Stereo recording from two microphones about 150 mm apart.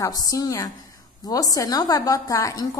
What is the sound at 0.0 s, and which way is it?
A woman's voice, 25° left (ahead or behind).